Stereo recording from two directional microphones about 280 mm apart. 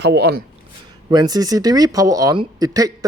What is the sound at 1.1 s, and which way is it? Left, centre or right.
Speech, centre.